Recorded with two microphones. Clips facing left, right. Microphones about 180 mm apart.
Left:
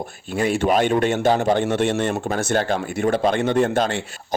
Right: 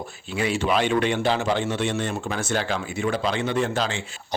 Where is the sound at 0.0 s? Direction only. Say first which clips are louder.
Left 4 dB; 45° left (ahead or behind).